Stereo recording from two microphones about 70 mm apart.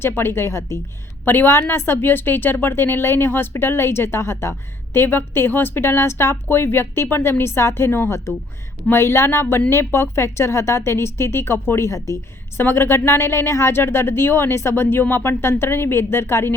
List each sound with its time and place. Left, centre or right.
0.0 s a woman's voice: left
1.2 s a woman's voice: left
12.5 s a woman's voice: left